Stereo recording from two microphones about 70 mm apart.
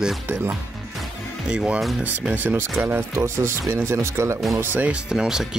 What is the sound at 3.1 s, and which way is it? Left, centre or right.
Speech, right.